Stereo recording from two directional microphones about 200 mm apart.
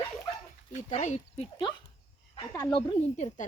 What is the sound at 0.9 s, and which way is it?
Speech, 35° left (ahead or behind).